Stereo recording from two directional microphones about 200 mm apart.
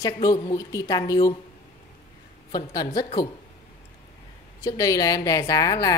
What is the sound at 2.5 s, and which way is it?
Speech, 20° left (ahead or behind).